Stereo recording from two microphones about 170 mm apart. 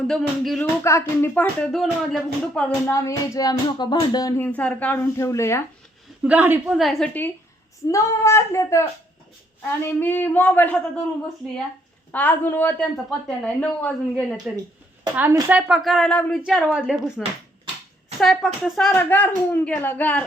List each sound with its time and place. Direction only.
0.0 s speech: 5° left (ahead or behind)
0.9 s speech: 15° left (ahead or behind)
1.3 s speech: centre (ahead or behind)
2.8 s music: 20° left (ahead or behind)
4.4 s speech: 10° left (ahead or behind)
6.2 s a woman's voice: 10° right (ahead or behind)
6.7 s speech: centre (ahead or behind)
12.1 s speech: 10° left (ahead or behind)
15.1 s speech: 10° right (ahead or behind); by 20.2 s 10° left (ahead or behind)